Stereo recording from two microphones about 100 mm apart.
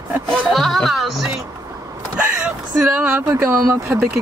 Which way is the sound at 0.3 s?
Centre (ahead or behind).